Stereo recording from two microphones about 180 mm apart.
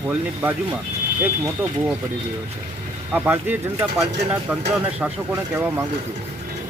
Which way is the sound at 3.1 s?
10° right (ahead or behind).